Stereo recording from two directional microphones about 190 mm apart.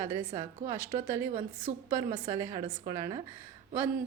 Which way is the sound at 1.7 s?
40° right (ahead or behind).